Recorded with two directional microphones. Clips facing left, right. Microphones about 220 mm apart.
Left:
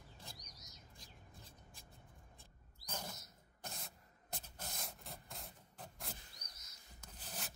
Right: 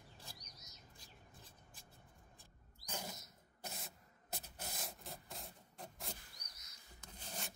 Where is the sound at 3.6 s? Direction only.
5° right (ahead or behind).